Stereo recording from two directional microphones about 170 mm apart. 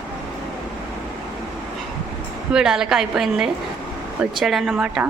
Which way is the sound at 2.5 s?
5° right (ahead or behind).